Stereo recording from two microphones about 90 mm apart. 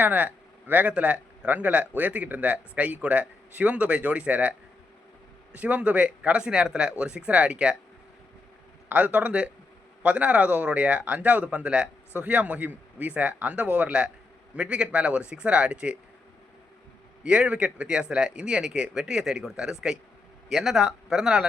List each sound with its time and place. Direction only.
0.0 s speech: 20° right (ahead or behind)
5.5 s speech: 15° right (ahead or behind)
8.9 s speech: 15° right (ahead or behind)
17.2 s speech: 10° right (ahead or behind)